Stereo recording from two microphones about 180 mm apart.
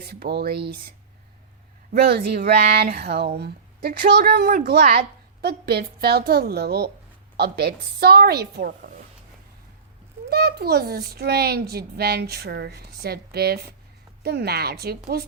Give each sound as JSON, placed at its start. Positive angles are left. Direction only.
{"t": 0.1, "sound": "speech", "side_deg": -65}
{"t": 1.9, "sound": "speech", "side_deg": -60}
{"t": 10.2, "sound": "speech", "side_deg": -60}